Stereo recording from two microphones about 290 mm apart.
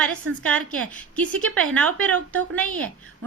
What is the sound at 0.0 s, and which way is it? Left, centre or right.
A woman's voice, centre.